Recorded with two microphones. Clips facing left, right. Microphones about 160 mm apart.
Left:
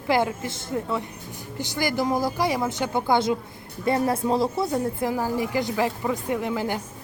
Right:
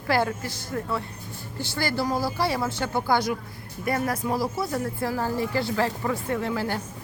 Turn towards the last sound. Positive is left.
turn(degrees=15)  # may be behind; listen again after turning